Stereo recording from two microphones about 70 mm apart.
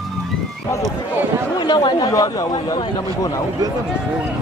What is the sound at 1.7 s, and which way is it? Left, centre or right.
Speech, left.